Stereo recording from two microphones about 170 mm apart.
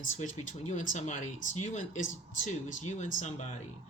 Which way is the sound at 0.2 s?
45° left (ahead or behind).